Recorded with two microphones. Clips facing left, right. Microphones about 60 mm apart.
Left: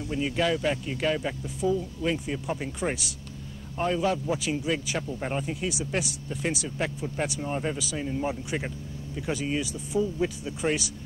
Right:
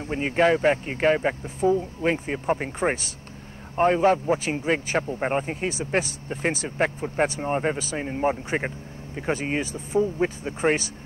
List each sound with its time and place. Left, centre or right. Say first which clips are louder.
0.0 s speech: right 5 dB; right